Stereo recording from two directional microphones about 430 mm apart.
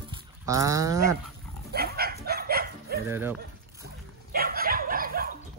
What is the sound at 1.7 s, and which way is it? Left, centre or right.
Bow-wow, right.